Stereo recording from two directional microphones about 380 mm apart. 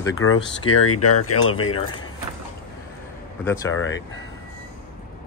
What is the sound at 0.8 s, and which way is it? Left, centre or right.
Speech, left.